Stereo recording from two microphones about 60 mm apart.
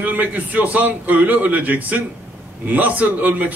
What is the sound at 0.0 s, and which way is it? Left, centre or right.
A man's voice, right.